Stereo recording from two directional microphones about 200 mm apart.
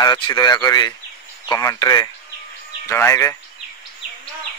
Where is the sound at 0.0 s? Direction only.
20° left (ahead or behind).